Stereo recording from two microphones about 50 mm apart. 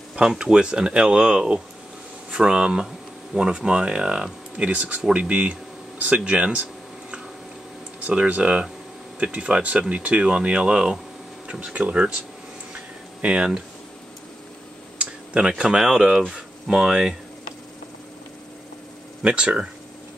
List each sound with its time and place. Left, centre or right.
0.3 s speech: centre
5.1 s a sound: right
8.1 s speech: right
12.7 s a sound: right
15.0 s tick-tock: right
15.8 s speech: centre
19.2 s speech: centre